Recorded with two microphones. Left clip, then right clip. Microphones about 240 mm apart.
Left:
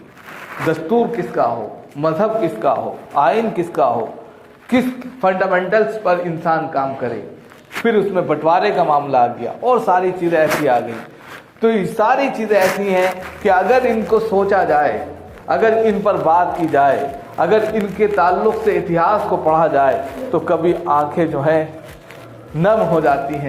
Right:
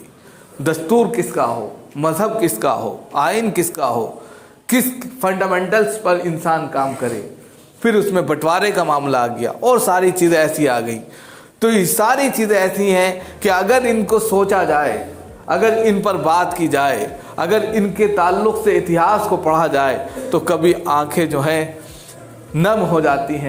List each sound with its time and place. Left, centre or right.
0.7 s a man's voice: right